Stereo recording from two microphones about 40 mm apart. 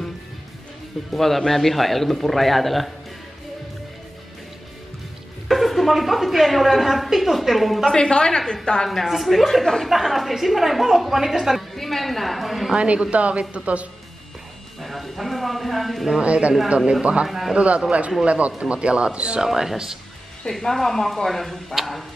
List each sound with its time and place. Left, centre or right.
1.1 s a woman's voice: centre
5.5 s a woman's voice: centre
7.9 s a woman's voice: left
9.0 s a woman's voice: centre
12.7 s speech: right
14.8 s a sound: centre
16.2 s speech: right
17.3 s a woman's voice: centre
17.6 s speech: right
19.4 s speech: centre
20.4 s speech: centre